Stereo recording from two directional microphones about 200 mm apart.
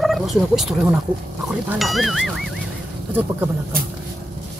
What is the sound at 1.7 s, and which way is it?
Ding, centre (ahead or behind).